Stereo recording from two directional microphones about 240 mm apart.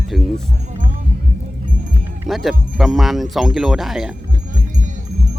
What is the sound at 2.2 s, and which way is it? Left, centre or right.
Speech, centre.